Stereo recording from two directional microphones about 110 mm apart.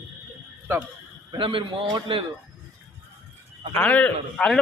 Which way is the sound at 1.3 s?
50° right (ahead or behind).